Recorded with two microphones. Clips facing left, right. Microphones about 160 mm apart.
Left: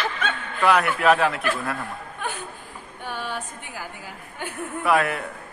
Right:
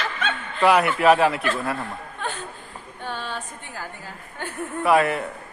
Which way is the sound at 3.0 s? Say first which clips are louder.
Even; 10° left (ahead or behind).